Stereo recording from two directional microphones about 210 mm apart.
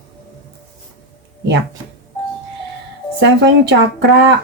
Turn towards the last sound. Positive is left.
turn(degrees=-55)  # may be behind; listen again after turning